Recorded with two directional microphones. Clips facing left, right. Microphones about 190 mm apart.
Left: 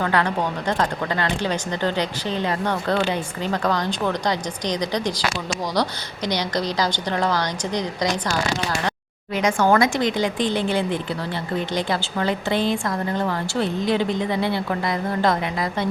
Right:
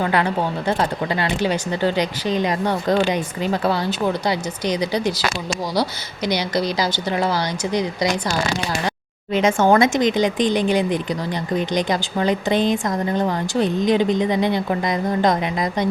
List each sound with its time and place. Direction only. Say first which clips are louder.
0.0 s speech: right 2 dB; 15° right (ahead or behind)
6.2 s speech: right 3 dB; 10° right (ahead or behind)
9.3 s speech: right 3 dB; 25° right (ahead or behind)